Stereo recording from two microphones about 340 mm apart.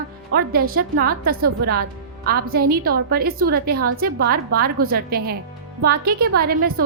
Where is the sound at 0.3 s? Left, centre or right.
Right.